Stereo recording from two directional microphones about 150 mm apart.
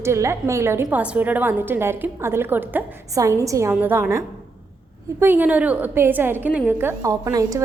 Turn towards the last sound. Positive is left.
turn(degrees=-25)  # may be behind; listen again after turning